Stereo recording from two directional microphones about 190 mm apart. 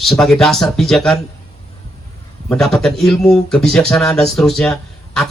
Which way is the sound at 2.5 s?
Centre (ahead or behind).